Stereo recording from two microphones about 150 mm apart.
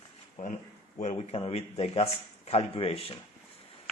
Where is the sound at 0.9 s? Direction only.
45° left (ahead or behind).